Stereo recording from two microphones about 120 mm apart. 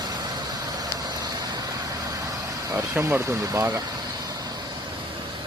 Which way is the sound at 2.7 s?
20° right (ahead or behind).